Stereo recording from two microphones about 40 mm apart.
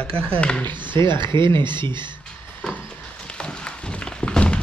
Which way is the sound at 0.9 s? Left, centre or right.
Left.